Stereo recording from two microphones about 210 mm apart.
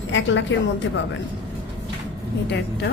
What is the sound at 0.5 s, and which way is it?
Speech, 60° left (ahead or behind).